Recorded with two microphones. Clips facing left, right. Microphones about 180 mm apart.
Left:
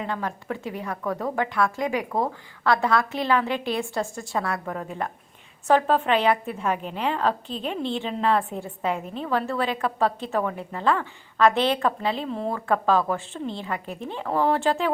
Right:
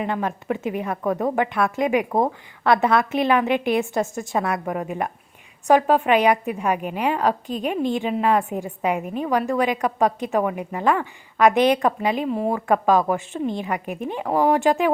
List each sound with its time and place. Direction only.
0.0 s a woman's voice: 20° right (ahead or behind)